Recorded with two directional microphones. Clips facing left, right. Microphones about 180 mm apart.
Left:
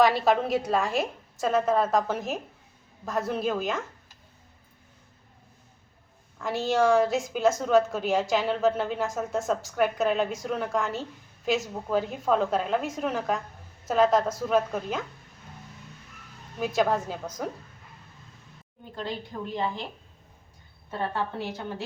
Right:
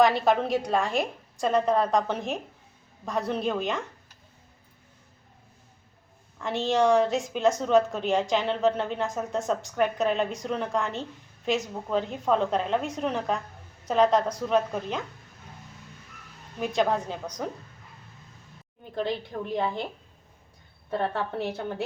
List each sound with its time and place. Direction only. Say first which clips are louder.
0.0 s a woman's voice: even; centre (ahead or behind)
6.4 s a woman's voice: even; centre (ahead or behind)
16.6 s a woman's voice: even; 5° left (ahead or behind)
20.9 s a woman's voice: right 2 dB; 60° right (ahead or behind)